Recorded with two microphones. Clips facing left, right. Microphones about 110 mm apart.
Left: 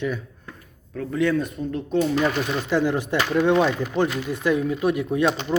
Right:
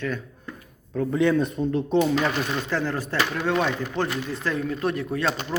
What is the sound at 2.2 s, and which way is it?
Speech, 15° left (ahead or behind).